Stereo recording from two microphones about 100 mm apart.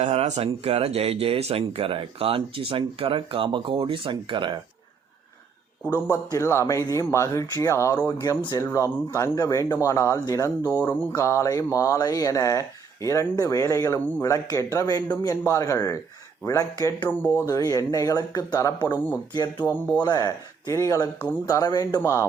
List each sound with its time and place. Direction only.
0.0 s speech: 90° right; by 4.5 s 55° right (ahead or behind)
6.1 s speech: 30° left (ahead or behind)
10.6 s speech: 20° right (ahead or behind)
11.1 s speech: 30° left (ahead or behind)
19.3 s music: 50° left (ahead or behind)
20.0 s speech: 40° left (ahead or behind)
22.0 s speech: 30° left (ahead or behind)